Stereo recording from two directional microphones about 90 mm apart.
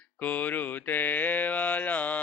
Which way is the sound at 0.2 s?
20° left (ahead or behind).